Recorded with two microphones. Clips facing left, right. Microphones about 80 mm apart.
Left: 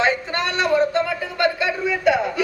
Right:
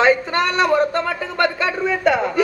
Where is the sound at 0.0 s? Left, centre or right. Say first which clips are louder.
Right 5 dB; right.